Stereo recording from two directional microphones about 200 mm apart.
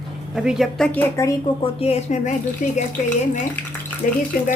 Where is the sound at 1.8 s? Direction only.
35° left (ahead or behind).